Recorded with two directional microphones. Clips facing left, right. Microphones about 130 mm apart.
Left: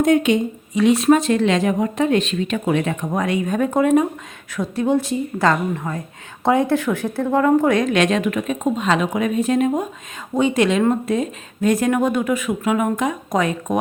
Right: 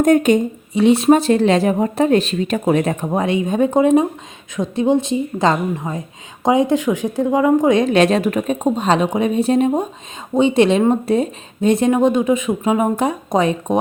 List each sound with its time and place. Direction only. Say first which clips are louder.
0.0 s a woman's voice: right 3 dB; 45° right (ahead or behind)
0.7 s speech: right 2 dB; 30° right (ahead or behind)
3.1 s speech: right 3 dB; 25° right (ahead or behind)
7.8 s speech: right 4 dB; 30° right (ahead or behind)